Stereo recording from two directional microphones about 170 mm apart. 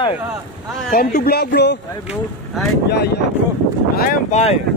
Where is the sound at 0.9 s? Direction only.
60° left (ahead or behind); by 1.8 s 85° left.